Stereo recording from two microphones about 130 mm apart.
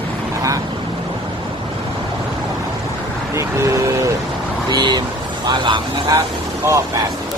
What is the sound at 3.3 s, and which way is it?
Speech, 25° right (ahead or behind).